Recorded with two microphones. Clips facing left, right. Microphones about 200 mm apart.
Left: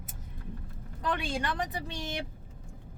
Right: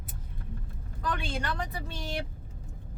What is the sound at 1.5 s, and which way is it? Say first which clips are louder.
Speech: left 2 dB; 15° left (ahead or behind).